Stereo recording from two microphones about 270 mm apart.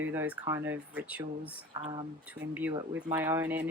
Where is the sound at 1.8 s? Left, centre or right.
Centre.